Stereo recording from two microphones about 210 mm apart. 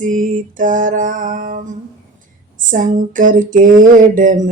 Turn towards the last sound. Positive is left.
turn(degrees=-40)  # may be behind; listen again after turning